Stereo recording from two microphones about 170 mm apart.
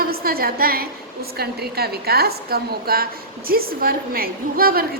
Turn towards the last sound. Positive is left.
turn(degrees=-60)  # may be behind; listen again after turning